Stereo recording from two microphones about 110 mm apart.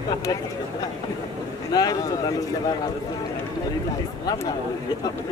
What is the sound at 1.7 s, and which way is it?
Speech, 35° left (ahead or behind).